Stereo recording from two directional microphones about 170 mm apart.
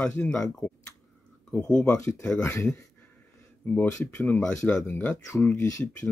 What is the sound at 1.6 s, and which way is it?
Speech, 5° left (ahead or behind).